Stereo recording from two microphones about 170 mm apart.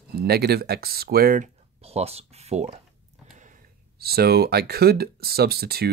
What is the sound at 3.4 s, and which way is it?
Speech, 50° right (ahead or behind).